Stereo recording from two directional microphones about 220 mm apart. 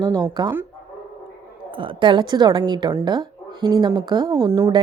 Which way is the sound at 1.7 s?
20° right (ahead or behind).